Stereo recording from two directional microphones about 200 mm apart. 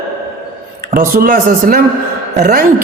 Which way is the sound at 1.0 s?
45° right (ahead or behind).